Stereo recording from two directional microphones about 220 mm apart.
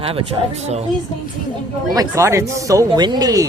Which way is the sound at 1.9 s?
15° right (ahead or behind).